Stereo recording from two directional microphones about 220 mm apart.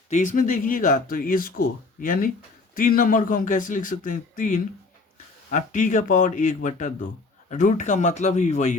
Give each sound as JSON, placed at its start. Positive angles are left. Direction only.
{"t": 0.1, "sound": "speech", "side_deg": 35}